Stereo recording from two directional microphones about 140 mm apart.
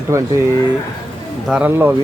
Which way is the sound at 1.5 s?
10° right (ahead or behind).